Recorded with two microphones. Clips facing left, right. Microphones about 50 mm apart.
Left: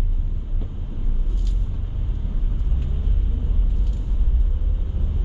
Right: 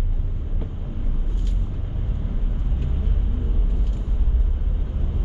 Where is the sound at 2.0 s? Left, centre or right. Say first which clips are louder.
Right 2 dB; right.